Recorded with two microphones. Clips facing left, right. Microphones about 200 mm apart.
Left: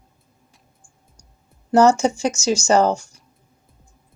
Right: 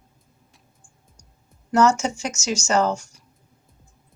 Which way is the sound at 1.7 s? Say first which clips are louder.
Left 4 dB; 30° left (ahead or behind).